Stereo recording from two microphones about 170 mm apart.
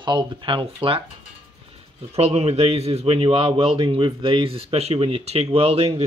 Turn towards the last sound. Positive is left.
turn(degrees=-35)  # may be behind; listen again after turning